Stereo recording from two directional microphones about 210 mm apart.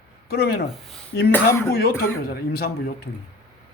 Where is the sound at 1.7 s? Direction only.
45° left (ahead or behind).